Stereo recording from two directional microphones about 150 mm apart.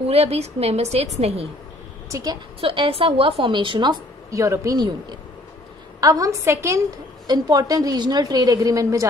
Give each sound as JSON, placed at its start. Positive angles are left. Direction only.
{"t": 0.0, "sound": "a woman's voice", "side_deg": -40}
{"t": 2.0, "sound": "a woman's voice", "side_deg": -20}
{"t": 2.6, "sound": "a woman's voice", "side_deg": -35}
{"t": 5.9, "sound": "a woman's voice", "side_deg": -25}